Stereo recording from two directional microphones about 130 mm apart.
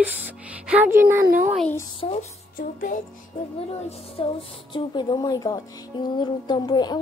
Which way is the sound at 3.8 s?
55° left (ahead or behind).